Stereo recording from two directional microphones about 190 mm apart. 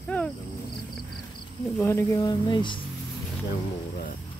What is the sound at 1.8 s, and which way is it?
Speech, 15° left (ahead or behind).